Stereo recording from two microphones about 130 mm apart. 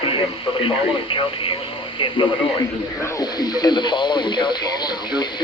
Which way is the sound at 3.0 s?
30° left (ahead or behind).